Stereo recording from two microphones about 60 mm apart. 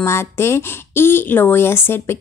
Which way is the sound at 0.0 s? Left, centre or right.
Left.